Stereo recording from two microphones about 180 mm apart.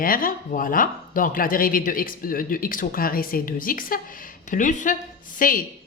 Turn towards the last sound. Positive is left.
turn(degrees=50)  # may be behind; listen again after turning